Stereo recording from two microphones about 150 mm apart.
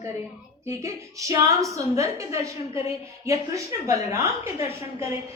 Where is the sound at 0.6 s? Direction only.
20° right (ahead or behind).